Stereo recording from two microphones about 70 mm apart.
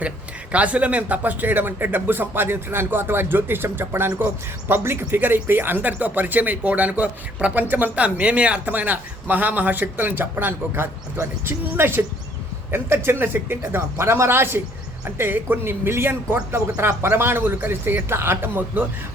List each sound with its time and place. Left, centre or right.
0.5 s a man's voice: centre